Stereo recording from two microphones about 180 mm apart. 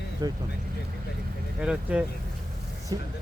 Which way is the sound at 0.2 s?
20° right (ahead or behind).